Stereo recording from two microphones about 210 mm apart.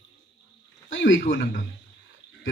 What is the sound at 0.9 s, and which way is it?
Speech, 65° left (ahead or behind).